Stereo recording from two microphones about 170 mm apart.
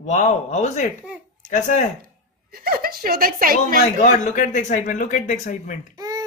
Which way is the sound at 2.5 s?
60° right (ahead or behind).